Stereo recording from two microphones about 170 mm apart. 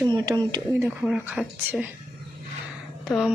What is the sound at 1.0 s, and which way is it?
Speech, 10° right (ahead or behind).